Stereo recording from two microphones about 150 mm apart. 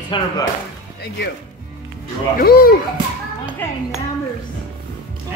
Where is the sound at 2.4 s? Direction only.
80° left.